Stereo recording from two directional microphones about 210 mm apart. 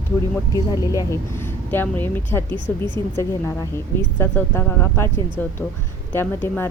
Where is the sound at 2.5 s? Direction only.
20° right (ahead or behind).